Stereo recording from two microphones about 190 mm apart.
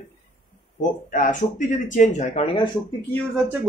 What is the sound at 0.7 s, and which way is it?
Speech, 45° left (ahead or behind).